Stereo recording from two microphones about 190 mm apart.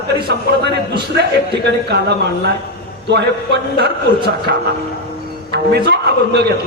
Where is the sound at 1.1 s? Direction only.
60° right (ahead or behind).